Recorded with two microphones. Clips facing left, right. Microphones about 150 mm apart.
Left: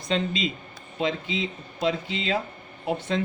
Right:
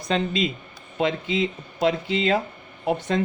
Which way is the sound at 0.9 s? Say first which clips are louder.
Right 4 dB; 60° right (ahead or behind).